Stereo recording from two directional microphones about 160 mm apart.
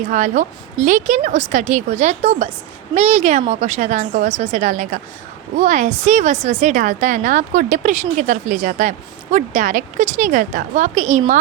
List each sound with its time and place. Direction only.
0.1 s a woman's voice: 50° right (ahead or behind)